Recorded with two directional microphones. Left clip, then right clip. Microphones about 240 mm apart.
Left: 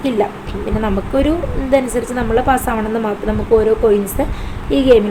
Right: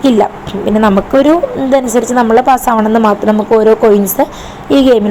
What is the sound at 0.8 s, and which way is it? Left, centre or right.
Speech, right.